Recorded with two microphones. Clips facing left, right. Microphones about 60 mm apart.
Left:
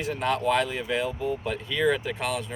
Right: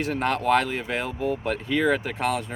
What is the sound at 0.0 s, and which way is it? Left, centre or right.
Speech, right.